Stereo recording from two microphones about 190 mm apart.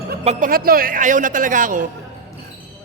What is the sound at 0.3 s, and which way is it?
A man's voice, 45° right (ahead or behind).